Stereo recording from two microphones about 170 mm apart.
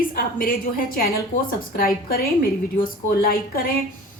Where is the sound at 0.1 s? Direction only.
60° left (ahead or behind).